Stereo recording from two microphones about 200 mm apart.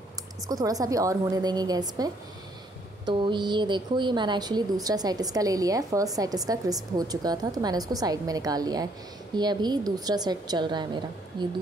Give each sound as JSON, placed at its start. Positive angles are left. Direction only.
{"t": 0.5, "sound": "a woman's voice", "side_deg": -15}